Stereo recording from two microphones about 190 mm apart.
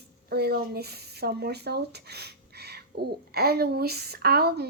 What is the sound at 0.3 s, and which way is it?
Speech, 55° right (ahead or behind).